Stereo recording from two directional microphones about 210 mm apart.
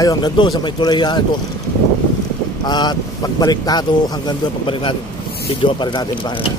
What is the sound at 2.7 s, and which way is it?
Speech, 20° left (ahead or behind).